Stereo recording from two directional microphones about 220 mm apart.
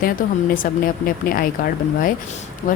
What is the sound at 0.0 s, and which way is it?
A woman's voice, 40° left (ahead or behind).